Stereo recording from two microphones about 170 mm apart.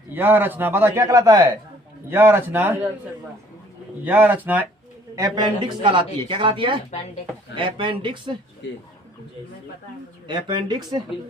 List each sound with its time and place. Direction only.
0.1 s a man's voice: 10° right (ahead or behind)
4.0 s a man's voice: 10° right (ahead or behind)
5.1 s a man's voice: 20° right (ahead or behind)
10.2 s a man's voice: 25° right (ahead or behind)